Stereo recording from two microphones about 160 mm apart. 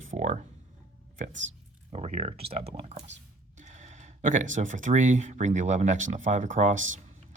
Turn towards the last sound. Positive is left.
turn(degrees=-50)  # may be behind; listen again after turning